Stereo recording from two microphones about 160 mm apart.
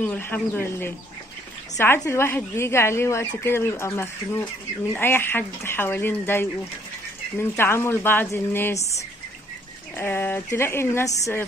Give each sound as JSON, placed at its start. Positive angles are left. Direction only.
{"t": 0.0, "sound": "speech", "side_deg": 15}
{"t": 9.9, "sound": "speech", "side_deg": 15}